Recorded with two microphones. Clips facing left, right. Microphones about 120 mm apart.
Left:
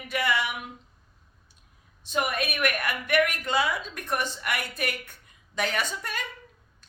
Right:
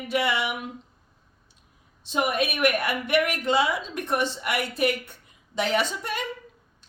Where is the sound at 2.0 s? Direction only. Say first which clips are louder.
Right 3 dB; 25° right (ahead or behind).